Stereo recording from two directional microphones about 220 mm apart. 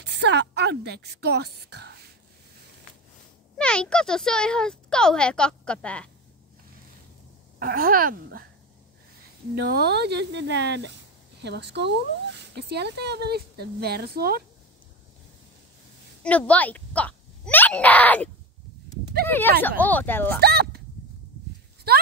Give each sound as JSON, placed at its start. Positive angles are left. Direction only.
{"t": 0.0, "sound": "speech", "side_deg": -50}
{"t": 3.5, "sound": "speech", "side_deg": 5}
{"t": 7.5, "sound": "speech", "side_deg": -40}
{"t": 9.7, "sound": "speech", "side_deg": -50}
{"t": 16.2, "sound": "a child's voice", "side_deg": 5}
{"t": 20.3, "sound": "a sound", "side_deg": -45}